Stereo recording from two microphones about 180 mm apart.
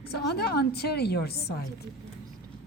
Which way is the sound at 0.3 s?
60° left (ahead or behind).